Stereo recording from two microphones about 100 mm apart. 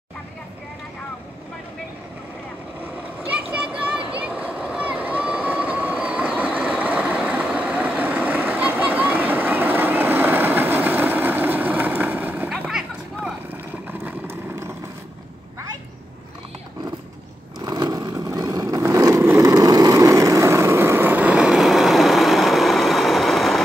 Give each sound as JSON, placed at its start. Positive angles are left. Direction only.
{"t": 3.3, "sound": "a sound", "side_deg": -10}
{"t": 4.2, "sound": "vehicle", "side_deg": -15}
{"t": 14.0, "sound": "vehicle", "side_deg": -25}
{"t": 17.6, "sound": "vehicle", "side_deg": -45}